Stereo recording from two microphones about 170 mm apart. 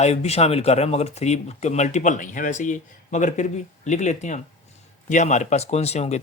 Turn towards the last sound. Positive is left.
turn(degrees=40)  # may be behind; listen again after turning